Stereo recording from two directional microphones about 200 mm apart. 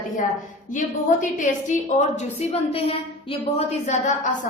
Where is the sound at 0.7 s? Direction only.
40° left (ahead or behind).